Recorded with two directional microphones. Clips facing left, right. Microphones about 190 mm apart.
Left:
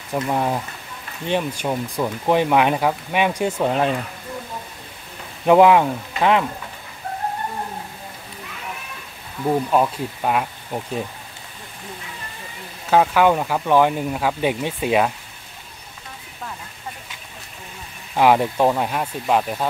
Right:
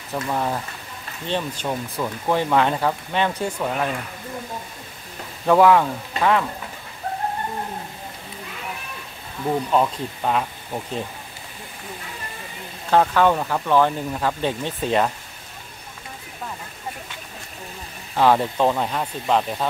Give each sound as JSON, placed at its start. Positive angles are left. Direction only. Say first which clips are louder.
{"t": 0.1, "sound": "speech", "louder": "left 3 dB", "side_deg": 15}
{"t": 3.5, "sound": "speech", "louder": "left 5 dB", "side_deg": 30}
{"t": 5.4, "sound": "speech", "louder": "left 2 dB", "side_deg": 15}
{"t": 9.5, "sound": "speech", "louder": "left 2 dB", "side_deg": 10}
{"t": 12.9, "sound": "speech", "louder": "left 1 dB", "side_deg": 10}
{"t": 18.1, "sound": "speech", "louder": "left 2 dB", "side_deg": 15}